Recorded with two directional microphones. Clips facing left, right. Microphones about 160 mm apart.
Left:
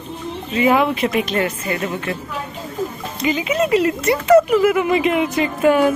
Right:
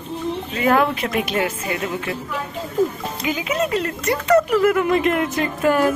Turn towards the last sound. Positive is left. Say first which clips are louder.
# left 3 dB
turn(degrees=0)  # may be behind; listen again after turning